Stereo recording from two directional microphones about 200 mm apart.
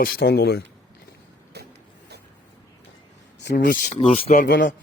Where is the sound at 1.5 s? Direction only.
55° right (ahead or behind).